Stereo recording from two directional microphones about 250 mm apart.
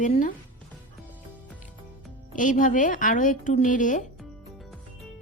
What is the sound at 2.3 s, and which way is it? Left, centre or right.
A woman's voice, left.